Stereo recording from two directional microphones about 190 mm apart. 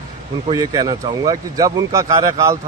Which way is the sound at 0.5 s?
20° right (ahead or behind).